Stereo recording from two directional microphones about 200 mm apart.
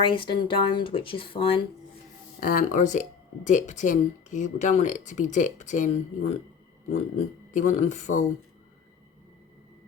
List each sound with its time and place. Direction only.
0.1 s speech: 25° left (ahead or behind)
2.4 s speech: 45° left (ahead or behind)
7.5 s speech: 40° left (ahead or behind)